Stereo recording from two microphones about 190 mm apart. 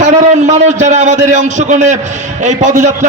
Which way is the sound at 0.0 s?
40° right (ahead or behind).